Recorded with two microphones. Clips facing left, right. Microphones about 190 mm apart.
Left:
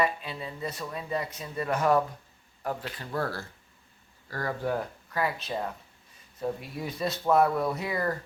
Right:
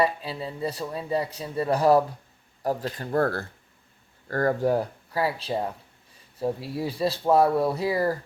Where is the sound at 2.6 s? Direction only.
35° right (ahead or behind); by 3.4 s 55° right (ahead or behind).